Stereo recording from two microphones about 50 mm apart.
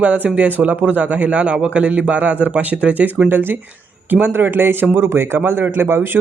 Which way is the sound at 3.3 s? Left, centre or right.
Right.